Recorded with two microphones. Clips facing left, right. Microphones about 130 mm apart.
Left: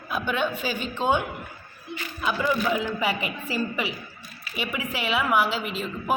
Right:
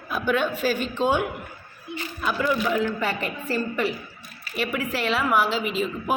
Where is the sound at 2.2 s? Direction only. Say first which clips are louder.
Right 1 dB; 5° left (ahead or behind).